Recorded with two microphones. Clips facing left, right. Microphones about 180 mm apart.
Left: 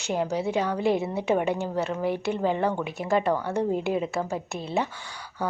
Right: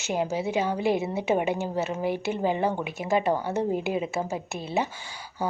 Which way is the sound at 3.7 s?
5° right (ahead or behind).